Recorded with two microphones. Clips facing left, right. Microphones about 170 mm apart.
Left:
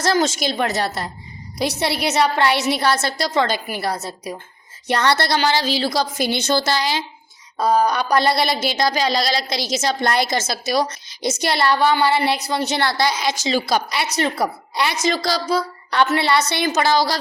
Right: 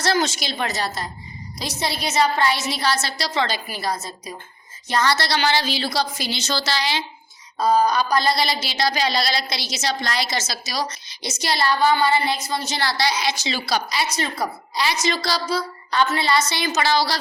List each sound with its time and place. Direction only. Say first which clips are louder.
0.0 s a woman's voice: left 3 dB; 45° left (ahead or behind)
5.4 s a woman's voice: left 3 dB; 40° left (ahead or behind)
7.6 s a woman's voice: left 1 dB; 65° left (ahead or behind); by 17.2 s 45° left (ahead or behind)